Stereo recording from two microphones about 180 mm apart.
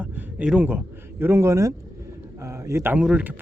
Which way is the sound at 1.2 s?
15° right (ahead or behind).